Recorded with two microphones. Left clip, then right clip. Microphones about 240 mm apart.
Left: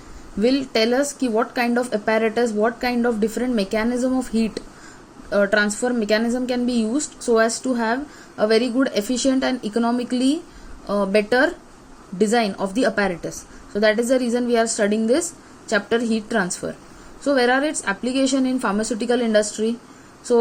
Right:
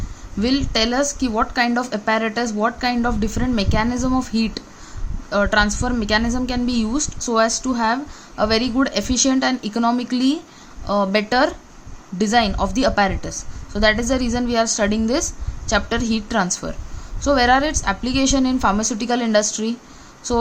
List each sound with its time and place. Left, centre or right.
0.4 s speech: right